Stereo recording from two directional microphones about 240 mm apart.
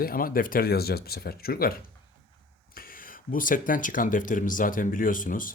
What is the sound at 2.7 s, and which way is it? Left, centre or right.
Speech, left.